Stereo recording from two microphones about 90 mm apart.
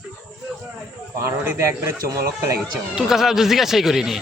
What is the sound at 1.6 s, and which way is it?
A man's voice, 35° right (ahead or behind).